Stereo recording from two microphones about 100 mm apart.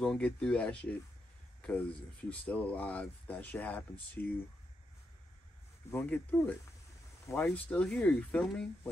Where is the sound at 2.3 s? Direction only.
15° left (ahead or behind).